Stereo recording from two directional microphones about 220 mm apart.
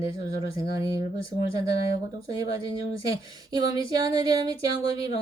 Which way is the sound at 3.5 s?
15° right (ahead or behind).